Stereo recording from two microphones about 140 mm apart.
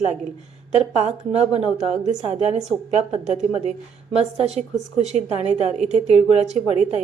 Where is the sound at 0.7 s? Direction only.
55° right (ahead or behind).